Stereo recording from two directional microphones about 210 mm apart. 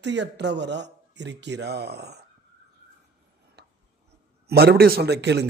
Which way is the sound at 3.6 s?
50° right (ahead or behind).